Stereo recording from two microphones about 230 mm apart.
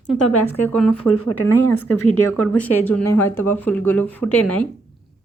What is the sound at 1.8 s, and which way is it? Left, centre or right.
Speech, left.